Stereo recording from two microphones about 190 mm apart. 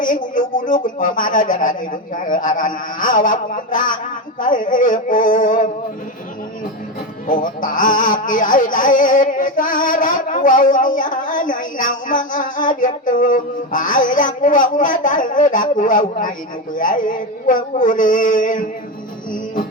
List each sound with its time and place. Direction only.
0.0 s music: 45° left (ahead or behind)
7.3 s music: 45° left (ahead or behind)